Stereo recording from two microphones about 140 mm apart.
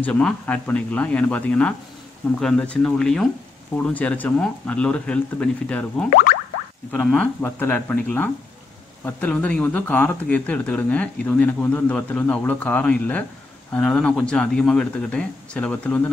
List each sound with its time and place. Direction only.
0.0 s speech: 10° left (ahead or behind)
6.0 s speech: 80° left
6.9 s speech: 5° left (ahead or behind)